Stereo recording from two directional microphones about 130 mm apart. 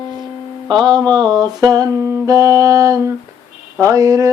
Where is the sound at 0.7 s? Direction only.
35° right (ahead or behind).